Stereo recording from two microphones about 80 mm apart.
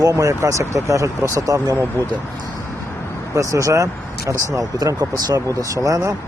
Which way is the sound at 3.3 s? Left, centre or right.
Right.